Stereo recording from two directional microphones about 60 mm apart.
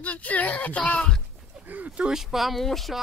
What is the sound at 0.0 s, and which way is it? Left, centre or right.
Speech, left.